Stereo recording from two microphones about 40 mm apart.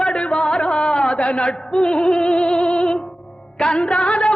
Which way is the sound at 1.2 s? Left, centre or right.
Left.